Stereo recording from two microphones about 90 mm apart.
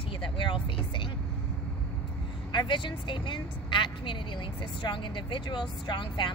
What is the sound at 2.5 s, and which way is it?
A woman's voice, 60° left (ahead or behind).